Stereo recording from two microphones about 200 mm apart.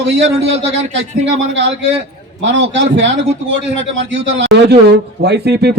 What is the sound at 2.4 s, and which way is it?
Speech, 60° right (ahead or behind).